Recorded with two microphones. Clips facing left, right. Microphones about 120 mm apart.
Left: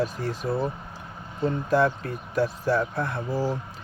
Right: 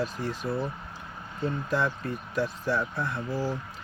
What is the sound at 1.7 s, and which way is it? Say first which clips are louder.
Speech: left 7 dB; 45° left (ahead or behind).